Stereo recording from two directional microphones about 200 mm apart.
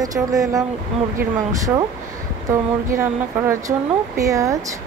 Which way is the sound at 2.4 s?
15° right (ahead or behind).